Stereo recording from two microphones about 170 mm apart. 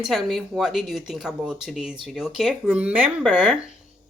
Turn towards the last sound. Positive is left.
turn(degrees=-5)  # may be behind; listen again after turning